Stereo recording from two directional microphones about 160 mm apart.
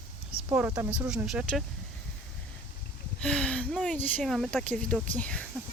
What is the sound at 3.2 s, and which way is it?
Speech, 5° left (ahead or behind).